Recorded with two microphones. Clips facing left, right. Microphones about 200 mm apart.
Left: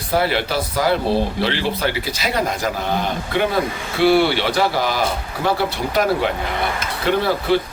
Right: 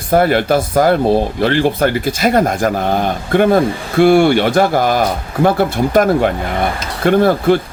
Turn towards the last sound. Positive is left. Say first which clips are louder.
# right 6 dB
turn(degrees=-50)  # may be behind; listen again after turning